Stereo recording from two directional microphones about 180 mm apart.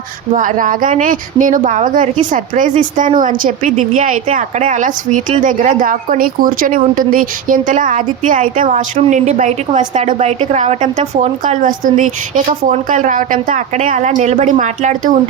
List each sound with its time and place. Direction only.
0.3 s speech: 45° right (ahead or behind)